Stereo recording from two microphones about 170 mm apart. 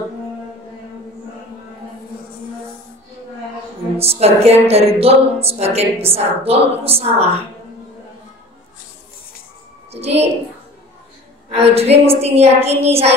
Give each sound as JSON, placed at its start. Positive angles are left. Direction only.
{"t": 4.0, "sound": "a woman's voice", "side_deg": -35}
{"t": 9.9, "sound": "a woman's voice", "side_deg": -40}
{"t": 11.5, "sound": "a woman's voice", "side_deg": -35}